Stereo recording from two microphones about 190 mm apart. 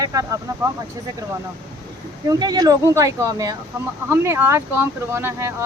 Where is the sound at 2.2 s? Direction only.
20° right (ahead or behind).